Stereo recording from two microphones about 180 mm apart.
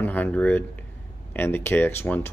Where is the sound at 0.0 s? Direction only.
10° left (ahead or behind).